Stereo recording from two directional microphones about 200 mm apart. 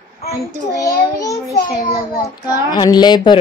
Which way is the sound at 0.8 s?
15° left (ahead or behind).